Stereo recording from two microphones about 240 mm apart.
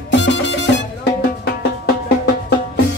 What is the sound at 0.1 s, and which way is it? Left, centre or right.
Music, left.